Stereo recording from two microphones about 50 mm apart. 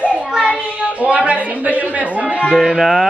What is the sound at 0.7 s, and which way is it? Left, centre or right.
Speech, right.